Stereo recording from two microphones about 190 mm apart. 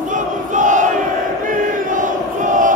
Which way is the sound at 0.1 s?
40° right (ahead or behind).